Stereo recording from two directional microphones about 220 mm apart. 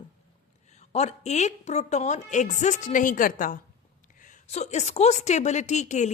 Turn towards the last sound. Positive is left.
turn(degrees=30)  # may be behind; listen again after turning